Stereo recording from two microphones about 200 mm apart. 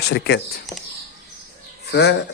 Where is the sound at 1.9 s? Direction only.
55° left (ahead or behind).